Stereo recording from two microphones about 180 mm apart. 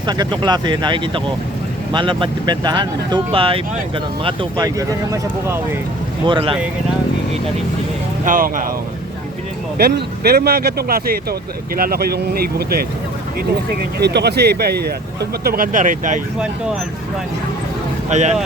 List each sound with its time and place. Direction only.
0.0 s speech: 25° right (ahead or behind)
6.2 s speech: 30° right (ahead or behind)
8.2 s speech: 50° right (ahead or behind)
9.7 s speech: 60° right (ahead or behind)
14.0 s speech: 65° right (ahead or behind); by 16.2 s 45° right (ahead or behind)
18.1 s speech: 40° right (ahead or behind)